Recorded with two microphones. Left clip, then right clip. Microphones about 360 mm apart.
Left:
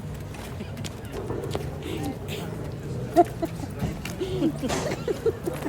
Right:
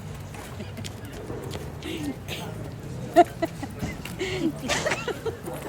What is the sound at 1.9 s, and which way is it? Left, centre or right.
Speech, right.